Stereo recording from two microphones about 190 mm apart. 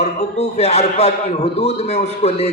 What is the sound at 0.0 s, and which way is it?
A man's voice, 35° left (ahead or behind).